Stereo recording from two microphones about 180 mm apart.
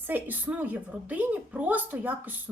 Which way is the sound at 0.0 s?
10° right (ahead or behind).